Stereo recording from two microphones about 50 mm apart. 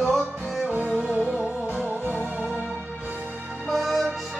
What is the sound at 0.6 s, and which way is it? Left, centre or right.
Music, right.